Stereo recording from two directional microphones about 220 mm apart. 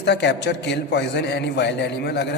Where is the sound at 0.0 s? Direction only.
50° left (ahead or behind).